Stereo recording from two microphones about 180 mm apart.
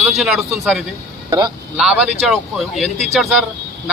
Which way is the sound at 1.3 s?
20° right (ahead or behind).